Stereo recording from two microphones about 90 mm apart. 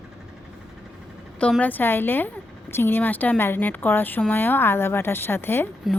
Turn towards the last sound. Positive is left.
turn(degrees=25)  # may be behind; listen again after turning